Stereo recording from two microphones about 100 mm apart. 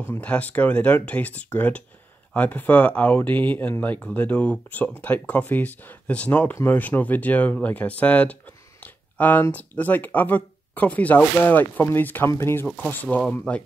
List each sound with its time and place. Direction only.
0.1 s speech: 15° left (ahead or behind)